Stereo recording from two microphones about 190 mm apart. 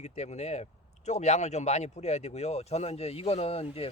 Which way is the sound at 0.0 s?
35° left (ahead or behind).